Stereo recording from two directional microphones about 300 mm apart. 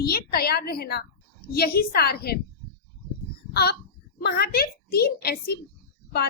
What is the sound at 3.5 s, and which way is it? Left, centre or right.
A woman's voice, left.